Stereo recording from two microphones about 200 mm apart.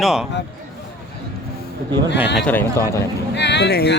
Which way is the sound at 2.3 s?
10° left (ahead or behind).